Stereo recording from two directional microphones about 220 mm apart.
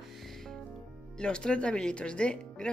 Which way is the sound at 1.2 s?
5° left (ahead or behind).